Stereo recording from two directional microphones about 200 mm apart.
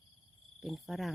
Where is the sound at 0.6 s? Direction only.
Centre (ahead or behind).